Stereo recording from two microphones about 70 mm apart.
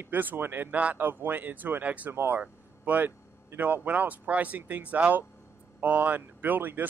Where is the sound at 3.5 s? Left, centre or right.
Right.